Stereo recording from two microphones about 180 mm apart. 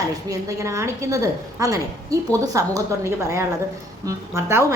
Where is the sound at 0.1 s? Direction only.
20° right (ahead or behind).